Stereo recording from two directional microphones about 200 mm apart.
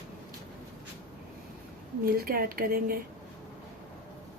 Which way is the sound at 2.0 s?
45° right (ahead or behind).